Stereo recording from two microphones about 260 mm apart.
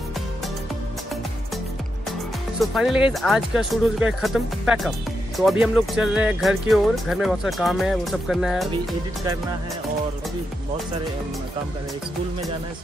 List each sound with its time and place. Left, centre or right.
2.6 s speech: centre